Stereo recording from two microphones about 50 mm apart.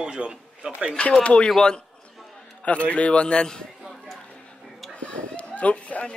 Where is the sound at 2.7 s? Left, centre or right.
Left.